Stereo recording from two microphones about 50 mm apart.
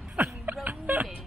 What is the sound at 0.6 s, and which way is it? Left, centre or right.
Music, right.